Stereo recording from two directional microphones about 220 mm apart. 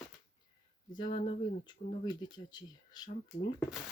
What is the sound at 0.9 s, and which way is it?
Speech, 20° left (ahead or behind).